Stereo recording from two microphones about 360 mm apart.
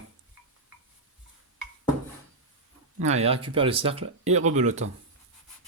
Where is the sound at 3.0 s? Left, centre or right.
Centre.